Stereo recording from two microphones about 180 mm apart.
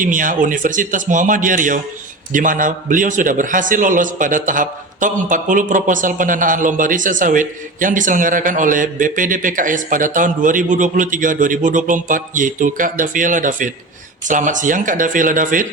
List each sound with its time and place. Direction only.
0.0 s a man's voice: 45° right (ahead or behind)